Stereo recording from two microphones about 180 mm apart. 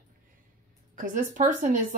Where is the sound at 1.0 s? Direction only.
45° right (ahead or behind).